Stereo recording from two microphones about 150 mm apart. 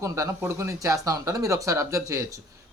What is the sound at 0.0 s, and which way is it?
Speech, 20° right (ahead or behind).